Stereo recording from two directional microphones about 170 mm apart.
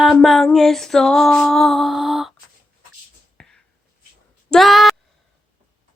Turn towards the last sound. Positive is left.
turn(degrees=0)  # may be behind; listen again after turning